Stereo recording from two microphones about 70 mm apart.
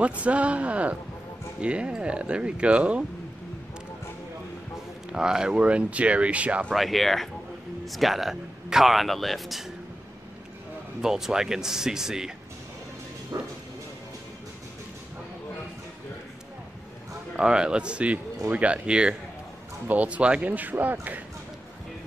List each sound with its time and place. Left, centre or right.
0.2 s speech: centre
5.1 s speech: centre
6.7 s speech: centre
11.0 s speech: centre
13.3 s speech: right
17.4 s speech: centre